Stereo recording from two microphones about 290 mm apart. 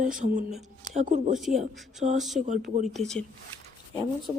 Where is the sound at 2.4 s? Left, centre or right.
Right.